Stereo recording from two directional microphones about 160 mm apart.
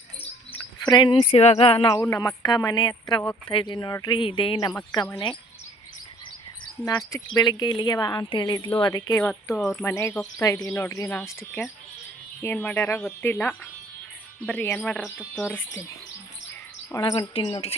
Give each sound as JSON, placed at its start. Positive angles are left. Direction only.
{"t": 0.2, "sound": "bird", "side_deg": 30}
{"t": 1.9, "sound": "speech", "side_deg": 20}
{"t": 6.8, "sound": "speech", "side_deg": 25}
{"t": 9.2, "sound": "speech", "side_deg": 10}
{"t": 9.6, "sound": "speech", "side_deg": 0}
{"t": 9.8, "sound": "speech", "side_deg": 20}
{"t": 16.9, "sound": "a woman's voice", "side_deg": 25}